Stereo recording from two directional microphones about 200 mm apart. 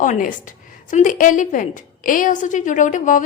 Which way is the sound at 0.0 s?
40° left (ahead or behind).